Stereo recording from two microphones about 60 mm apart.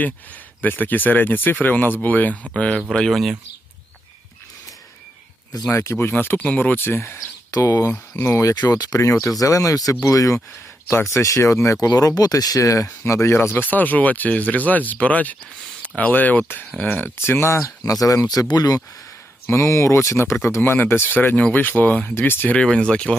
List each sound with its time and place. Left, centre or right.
0.6 s speech: left
3.1 s speech: centre
5.7 s speech: left
6.4 s speech: left
7.5 s speech: left
9.9 s speech: left
10.8 s speech: left
13.3 s speech: left
17.2 s speech: left
17.8 s speech: left
18.5 s speech: left
19.5 s speech: left
20.6 s speech: left
22.6 s speech: centre